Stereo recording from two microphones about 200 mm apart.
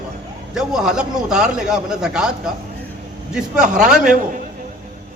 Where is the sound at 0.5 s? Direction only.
5° right (ahead or behind).